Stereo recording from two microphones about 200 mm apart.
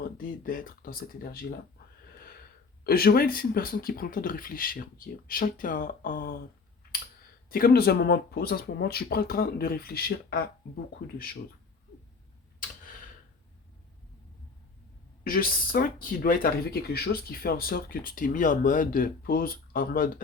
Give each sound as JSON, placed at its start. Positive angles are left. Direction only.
{"t": 0.2, "sound": "speech", "side_deg": 45}
{"t": 2.8, "sound": "speech", "side_deg": 50}
{"t": 7.5, "sound": "speech", "side_deg": 50}
{"t": 15.2, "sound": "speech", "side_deg": 45}